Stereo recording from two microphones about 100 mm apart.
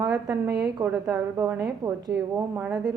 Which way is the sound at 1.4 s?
30° right (ahead or behind).